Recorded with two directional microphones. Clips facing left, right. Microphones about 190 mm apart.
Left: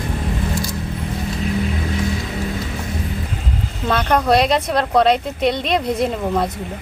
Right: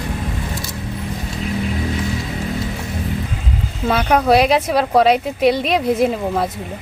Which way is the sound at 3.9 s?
5° right (ahead or behind).